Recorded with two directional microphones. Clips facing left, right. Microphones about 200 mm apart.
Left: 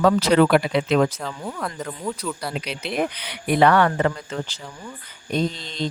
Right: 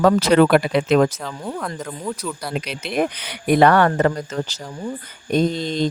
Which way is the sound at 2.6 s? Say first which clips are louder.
Right 4 dB; 45° right (ahead or behind).